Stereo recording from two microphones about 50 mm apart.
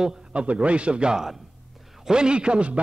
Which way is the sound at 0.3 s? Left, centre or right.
Right.